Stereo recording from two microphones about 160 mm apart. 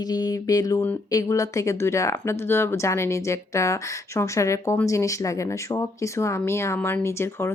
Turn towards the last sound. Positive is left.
turn(degrees=15)  # may be behind; listen again after turning